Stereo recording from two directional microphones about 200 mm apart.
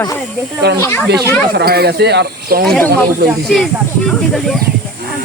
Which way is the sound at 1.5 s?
50° right (ahead or behind).